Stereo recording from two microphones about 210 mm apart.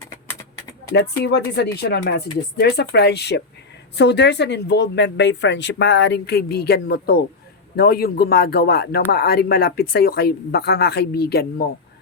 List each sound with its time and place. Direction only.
1.2 s speech: 55° left (ahead or behind)